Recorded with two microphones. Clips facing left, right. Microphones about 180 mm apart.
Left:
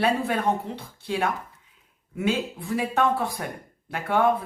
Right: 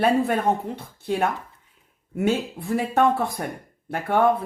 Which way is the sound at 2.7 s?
50° right (ahead or behind).